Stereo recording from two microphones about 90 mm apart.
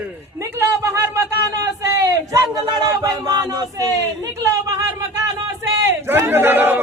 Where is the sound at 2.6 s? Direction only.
50° right (ahead or behind).